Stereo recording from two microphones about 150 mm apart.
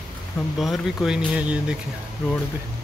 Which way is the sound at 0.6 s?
Centre (ahead or behind).